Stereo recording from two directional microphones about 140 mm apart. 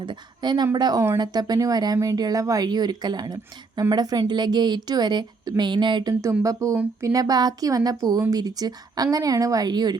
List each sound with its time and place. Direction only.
0.0 s a woman's voice: 35° right (ahead or behind)
6.4 s speech: 25° right (ahead or behind)